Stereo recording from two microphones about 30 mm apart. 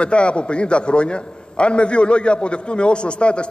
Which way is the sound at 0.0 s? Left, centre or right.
Left.